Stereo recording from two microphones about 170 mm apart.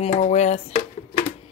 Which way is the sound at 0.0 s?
45° left (ahead or behind).